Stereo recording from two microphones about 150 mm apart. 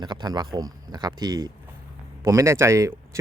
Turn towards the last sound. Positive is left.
turn(degrees=-20)  # may be behind; listen again after turning